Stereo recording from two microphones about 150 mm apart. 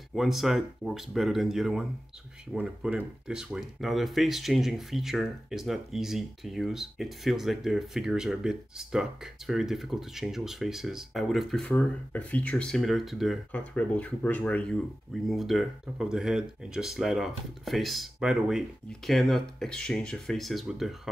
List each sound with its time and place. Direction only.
0.1 s speech: centre (ahead or behind)